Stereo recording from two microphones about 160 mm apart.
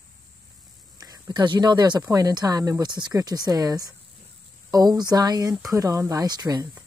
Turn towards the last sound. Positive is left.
turn(degrees=-25)  # may be behind; listen again after turning